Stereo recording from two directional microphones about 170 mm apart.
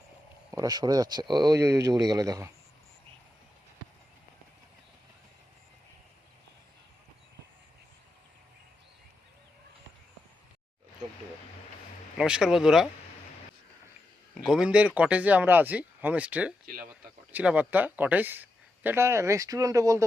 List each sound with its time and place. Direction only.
0.5 s speech: 20° right (ahead or behind)
12.1 s speech: 5° right (ahead or behind)
14.4 s speech: 5° right (ahead or behind)